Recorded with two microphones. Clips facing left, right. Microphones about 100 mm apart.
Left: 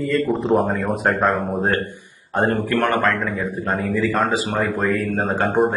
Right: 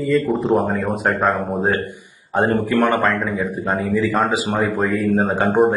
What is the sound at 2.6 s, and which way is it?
Speech, 15° right (ahead or behind).